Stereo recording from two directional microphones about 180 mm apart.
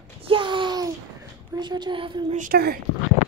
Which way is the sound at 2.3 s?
50° right (ahead or behind).